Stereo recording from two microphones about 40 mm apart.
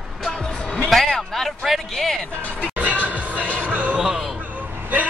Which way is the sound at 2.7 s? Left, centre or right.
Right.